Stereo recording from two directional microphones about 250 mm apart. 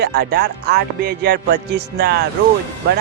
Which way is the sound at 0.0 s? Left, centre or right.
Right.